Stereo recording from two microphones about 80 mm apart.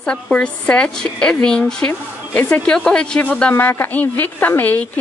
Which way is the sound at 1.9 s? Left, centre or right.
Left.